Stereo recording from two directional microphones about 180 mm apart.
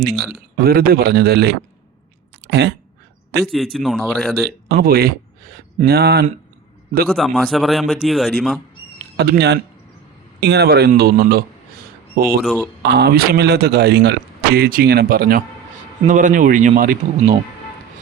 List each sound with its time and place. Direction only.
0.1 s a man's voice: centre (ahead or behind)
0.5 s a man's voice: 60° right (ahead or behind)
3.4 s a man's voice: centre (ahead or behind)
4.7 s a man's voice: 60° right (ahead or behind)
7.1 s a man's voice: centre (ahead or behind)
9.1 s a man's voice: 65° right (ahead or behind)
12.4 s a man's voice: centre (ahead or behind)
12.8 s a man's voice: 65° right (ahead or behind); by 17.3 s 50° right (ahead or behind)